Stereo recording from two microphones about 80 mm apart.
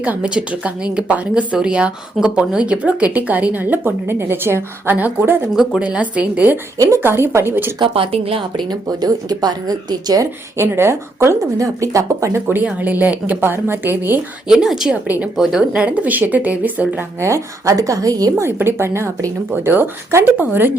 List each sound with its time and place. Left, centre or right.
0.0 s a woman's voice: centre
7.8 s speech: right
8.7 s speech: right
10.6 s speech: right
12.6 s speech: right
14.4 s a woman's voice: centre
15.0 s speech: centre
15.4 s speech: centre
17.2 s speech: right
18.4 s speech: right